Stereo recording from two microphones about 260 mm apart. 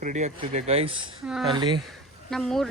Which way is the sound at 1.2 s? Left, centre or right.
Centre.